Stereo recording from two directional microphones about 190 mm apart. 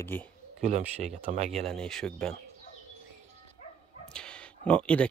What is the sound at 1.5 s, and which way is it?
Speech, 5° left (ahead or behind).